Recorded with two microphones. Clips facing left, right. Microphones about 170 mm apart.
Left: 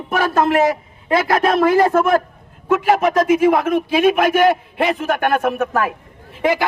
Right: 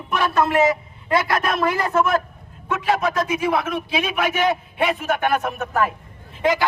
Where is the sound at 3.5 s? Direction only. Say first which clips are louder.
Left 6 dB; 50° left (ahead or behind).